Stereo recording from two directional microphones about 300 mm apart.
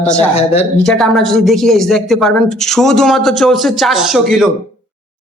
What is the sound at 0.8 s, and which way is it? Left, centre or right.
Speech, centre.